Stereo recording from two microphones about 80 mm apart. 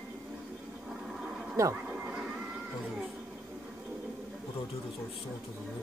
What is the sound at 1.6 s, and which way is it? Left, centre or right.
Speech, right.